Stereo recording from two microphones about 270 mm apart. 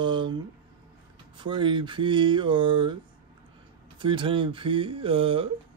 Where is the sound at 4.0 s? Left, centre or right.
Centre.